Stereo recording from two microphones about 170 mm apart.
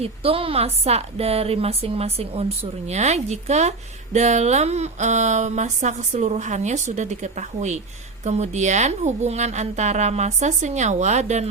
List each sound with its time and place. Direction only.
0.0 s a woman's voice: 35° right (ahead or behind)